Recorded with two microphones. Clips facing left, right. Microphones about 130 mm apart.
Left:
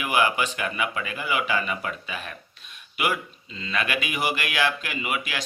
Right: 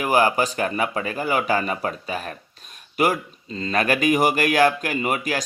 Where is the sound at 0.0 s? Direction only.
40° right (ahead or behind).